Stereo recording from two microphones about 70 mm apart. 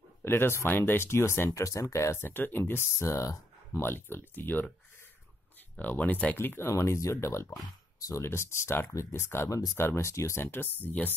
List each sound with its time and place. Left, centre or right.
0.2 s speech: left
3.0 s speech: left
3.8 s speech: left
5.8 s speech: left
6.3 s speech: left
6.7 s speech: left